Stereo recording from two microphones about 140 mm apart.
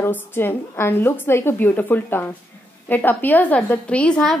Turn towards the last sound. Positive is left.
turn(degrees=5)  # may be behind; listen again after turning